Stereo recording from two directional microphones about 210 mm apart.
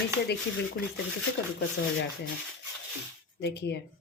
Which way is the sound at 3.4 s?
50° left (ahead or behind).